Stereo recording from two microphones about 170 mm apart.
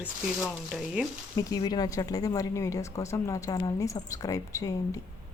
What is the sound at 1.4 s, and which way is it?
A woman's voice, 20° left (ahead or behind).